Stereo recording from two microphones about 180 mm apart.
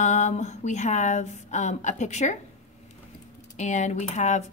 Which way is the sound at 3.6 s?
40° left (ahead or behind).